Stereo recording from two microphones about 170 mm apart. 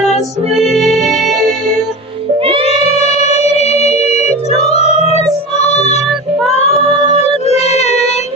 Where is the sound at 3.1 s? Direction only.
40° left (ahead or behind).